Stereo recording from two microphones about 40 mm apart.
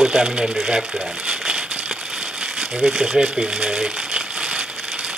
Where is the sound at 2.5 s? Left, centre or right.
Centre.